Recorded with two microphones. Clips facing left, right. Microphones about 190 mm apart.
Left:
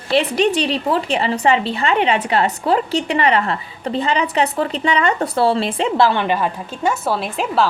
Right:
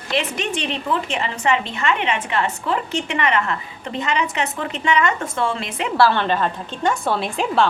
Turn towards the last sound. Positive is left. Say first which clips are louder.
# left 1 dB
turn(degrees=0)  # may be behind; listen again after turning